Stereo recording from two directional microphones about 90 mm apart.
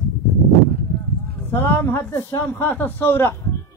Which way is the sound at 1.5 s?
25° left (ahead or behind).